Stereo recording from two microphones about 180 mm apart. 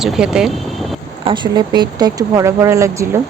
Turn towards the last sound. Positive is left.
turn(degrees=-15)  # may be behind; listen again after turning